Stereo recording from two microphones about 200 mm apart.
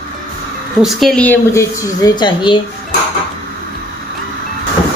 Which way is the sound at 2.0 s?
20° left (ahead or behind).